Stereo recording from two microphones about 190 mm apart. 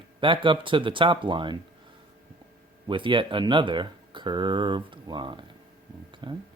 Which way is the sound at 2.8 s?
25° right (ahead or behind).